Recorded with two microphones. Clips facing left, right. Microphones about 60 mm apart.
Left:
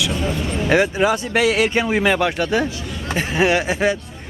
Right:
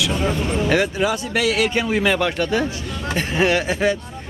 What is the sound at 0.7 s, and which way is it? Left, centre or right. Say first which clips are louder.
Speech: left 5 dB; left.